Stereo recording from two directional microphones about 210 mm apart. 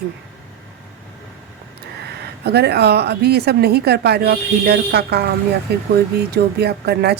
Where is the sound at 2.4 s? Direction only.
50° right (ahead or behind).